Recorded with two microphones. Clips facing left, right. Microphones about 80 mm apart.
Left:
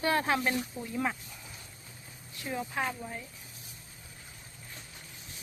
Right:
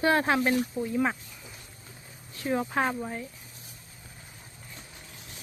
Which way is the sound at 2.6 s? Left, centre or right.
Right.